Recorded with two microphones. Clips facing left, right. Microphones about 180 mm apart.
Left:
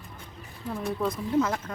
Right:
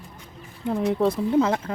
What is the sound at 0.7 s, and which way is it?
Speech, 30° right (ahead or behind).